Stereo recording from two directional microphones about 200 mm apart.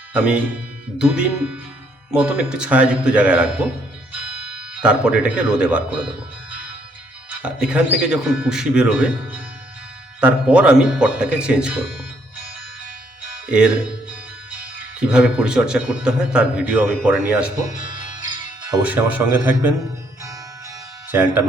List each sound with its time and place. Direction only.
0.1 s a man's voice: 5° right (ahead or behind)
7.3 s a man's voice: 5° right (ahead or behind)
14.9 s a man's voice: 5° right (ahead or behind)
18.2 s music: 20° right (ahead or behind)
18.8 s speech: 5° right (ahead or behind)